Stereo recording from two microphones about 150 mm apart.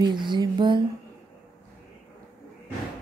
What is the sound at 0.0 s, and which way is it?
Speech, 30° right (ahead or behind).